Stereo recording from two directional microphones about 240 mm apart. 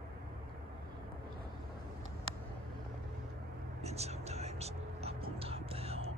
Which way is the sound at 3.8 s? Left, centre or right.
Right.